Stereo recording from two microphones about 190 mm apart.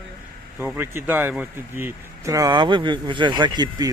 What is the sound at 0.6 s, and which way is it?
Speech, 10° right (ahead or behind).